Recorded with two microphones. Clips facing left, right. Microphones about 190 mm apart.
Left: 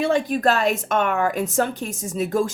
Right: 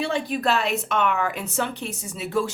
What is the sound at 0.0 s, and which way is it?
A woman's voice, 45° left (ahead or behind).